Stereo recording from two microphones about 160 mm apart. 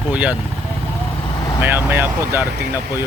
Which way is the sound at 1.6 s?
15° right (ahead or behind).